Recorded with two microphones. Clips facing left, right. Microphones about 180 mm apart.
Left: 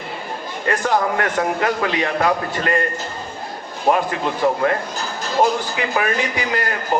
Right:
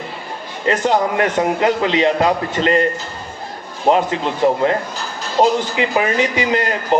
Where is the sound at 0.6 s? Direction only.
20° right (ahead or behind).